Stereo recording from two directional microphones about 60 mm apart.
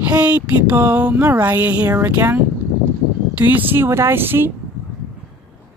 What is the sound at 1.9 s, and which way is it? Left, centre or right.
Speech, right.